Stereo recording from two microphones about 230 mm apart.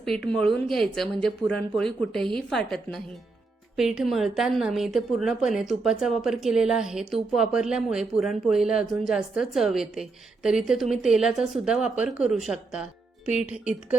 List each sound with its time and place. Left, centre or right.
0.3 s a woman's voice: centre